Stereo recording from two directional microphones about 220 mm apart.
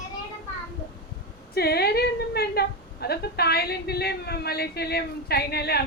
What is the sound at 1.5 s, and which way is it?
Whimper, 45° left (ahead or behind).